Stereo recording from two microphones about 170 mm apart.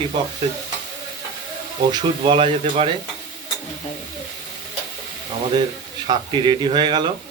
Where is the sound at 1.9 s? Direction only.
25° right (ahead or behind).